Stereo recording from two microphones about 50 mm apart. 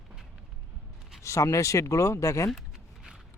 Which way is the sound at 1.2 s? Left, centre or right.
Left.